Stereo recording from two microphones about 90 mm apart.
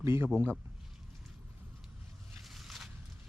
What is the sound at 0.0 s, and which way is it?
Speech, 30° right (ahead or behind).